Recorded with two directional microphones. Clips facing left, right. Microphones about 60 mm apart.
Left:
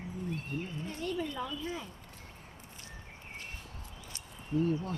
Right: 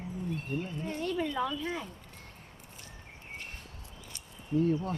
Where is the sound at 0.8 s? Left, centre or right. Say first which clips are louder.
Right 4 dB; right.